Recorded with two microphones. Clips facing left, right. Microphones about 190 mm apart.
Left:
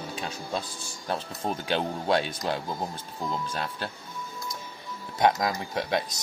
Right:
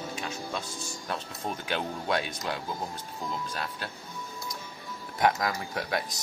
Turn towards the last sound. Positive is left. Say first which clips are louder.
# left 3 dB
turn(degrees=25)  # may be behind; listen again after turning